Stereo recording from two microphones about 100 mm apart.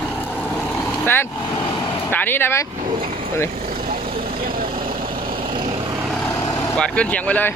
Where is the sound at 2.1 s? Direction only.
20° left (ahead or behind).